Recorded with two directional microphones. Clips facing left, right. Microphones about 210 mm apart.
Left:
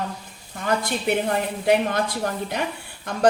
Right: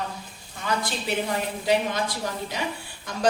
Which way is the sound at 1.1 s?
55° left (ahead or behind).